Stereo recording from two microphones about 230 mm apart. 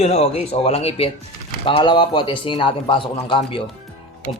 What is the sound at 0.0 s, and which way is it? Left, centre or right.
Speech, left.